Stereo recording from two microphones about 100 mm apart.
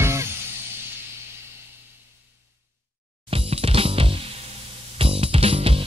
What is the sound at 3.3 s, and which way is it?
Music, 75° right (ahead or behind).